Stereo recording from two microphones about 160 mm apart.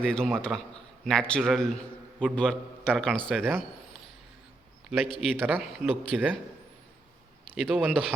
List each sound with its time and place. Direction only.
0.0 s a man's voice: 5° left (ahead or behind)
7.5 s a man's voice: centre (ahead or behind)